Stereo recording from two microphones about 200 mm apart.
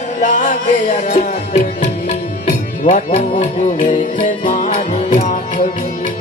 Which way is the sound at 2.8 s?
35° left (ahead or behind).